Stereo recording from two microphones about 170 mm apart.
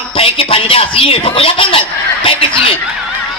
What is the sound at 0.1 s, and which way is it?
Speech, 35° left (ahead or behind).